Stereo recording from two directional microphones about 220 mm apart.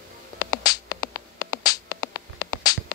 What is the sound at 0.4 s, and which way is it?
Music, 15° left (ahead or behind).